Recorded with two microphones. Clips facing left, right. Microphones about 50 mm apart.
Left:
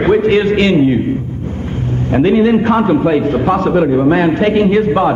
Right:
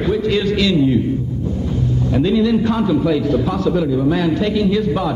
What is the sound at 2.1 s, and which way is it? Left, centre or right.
A man's voice, left.